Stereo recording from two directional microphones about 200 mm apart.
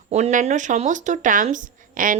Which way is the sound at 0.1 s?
35° right (ahead or behind).